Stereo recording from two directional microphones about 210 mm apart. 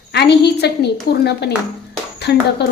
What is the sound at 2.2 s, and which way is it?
Speech, 50° left (ahead or behind).